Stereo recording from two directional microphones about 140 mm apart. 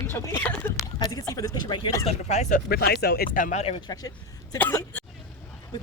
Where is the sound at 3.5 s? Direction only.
45° left (ahead or behind).